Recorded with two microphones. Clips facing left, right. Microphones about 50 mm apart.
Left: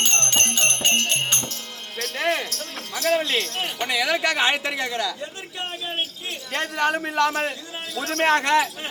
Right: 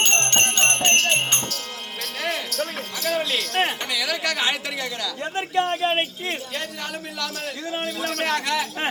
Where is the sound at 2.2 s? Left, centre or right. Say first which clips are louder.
Left 4 dB; left.